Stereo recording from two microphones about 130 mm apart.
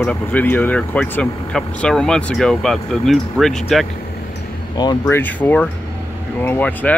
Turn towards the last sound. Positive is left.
turn(degrees=10)  # may be behind; listen again after turning